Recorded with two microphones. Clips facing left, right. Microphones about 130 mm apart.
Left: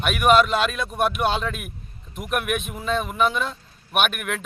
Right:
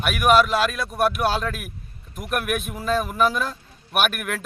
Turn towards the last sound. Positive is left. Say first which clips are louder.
# even
turn(degrees=0)  # may be behind; listen again after turning